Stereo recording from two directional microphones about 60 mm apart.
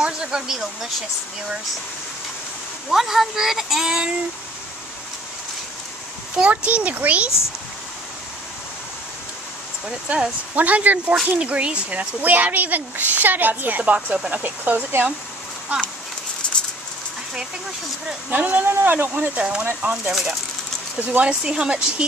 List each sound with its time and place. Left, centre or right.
0.0 s a sound: centre
2.9 s speech: centre
6.3 s speech: centre
10.0 s speech: right
16.4 s patter: centre
18.3 s speech: right
19.3 s speech: centre
20.1 s speech: centre
21.3 s speech: centre